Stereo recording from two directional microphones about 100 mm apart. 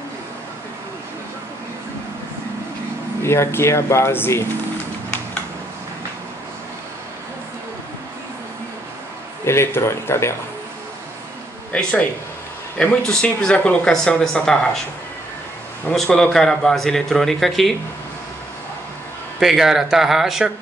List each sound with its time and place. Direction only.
3.2 s speech: 25° left (ahead or behind)
9.4 s speech: 25° left (ahead or behind)
11.7 s speech: 15° left (ahead or behind)
15.9 s a man's voice: 5° left (ahead or behind)
19.4 s a man's voice: 5° right (ahead or behind)